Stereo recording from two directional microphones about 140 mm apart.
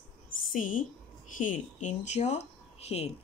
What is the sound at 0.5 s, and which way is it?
A woman's voice, 70° left (ahead or behind).